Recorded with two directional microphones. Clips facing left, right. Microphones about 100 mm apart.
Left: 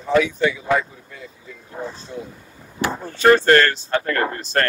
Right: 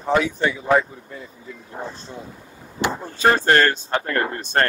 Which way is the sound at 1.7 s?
20° right (ahead or behind).